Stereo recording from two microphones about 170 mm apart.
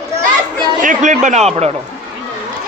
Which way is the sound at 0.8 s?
50° right (ahead or behind).